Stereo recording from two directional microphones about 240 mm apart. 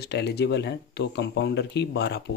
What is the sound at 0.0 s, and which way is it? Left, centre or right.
Speech, left.